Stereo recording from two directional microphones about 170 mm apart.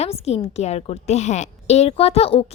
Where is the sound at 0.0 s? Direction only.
40° left (ahead or behind).